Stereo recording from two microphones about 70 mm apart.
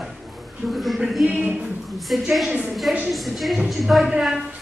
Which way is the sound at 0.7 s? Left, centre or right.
Centre.